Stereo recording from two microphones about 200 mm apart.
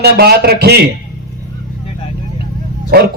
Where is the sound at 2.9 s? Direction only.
50° right (ahead or behind).